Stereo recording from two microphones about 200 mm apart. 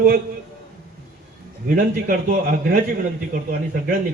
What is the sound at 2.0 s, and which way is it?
Speech, 45° right (ahead or behind).